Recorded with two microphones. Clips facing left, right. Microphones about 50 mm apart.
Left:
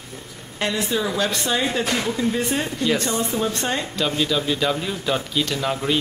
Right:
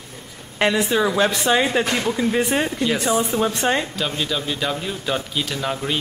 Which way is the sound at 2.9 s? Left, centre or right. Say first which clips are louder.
Left 1 dB; centre.